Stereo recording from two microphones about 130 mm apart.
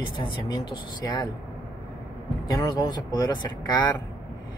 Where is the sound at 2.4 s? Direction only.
30° left (ahead or behind).